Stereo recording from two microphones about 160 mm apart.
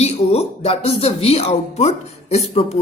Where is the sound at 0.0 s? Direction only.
40° left (ahead or behind).